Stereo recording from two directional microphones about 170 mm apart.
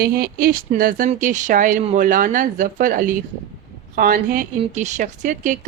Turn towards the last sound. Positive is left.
turn(degrees=-45)  # may be behind; listen again after turning